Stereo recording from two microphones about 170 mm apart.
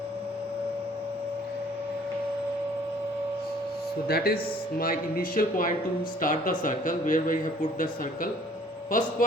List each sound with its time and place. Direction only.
4.1 s a man's voice: 65° left (ahead or behind)
8.9 s speech: 50° left (ahead or behind)